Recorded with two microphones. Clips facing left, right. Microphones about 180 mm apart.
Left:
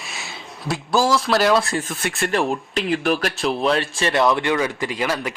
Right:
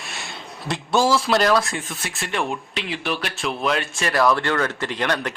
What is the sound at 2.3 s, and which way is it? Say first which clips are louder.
Speech: left 2 dB; 35° left (ahead or behind).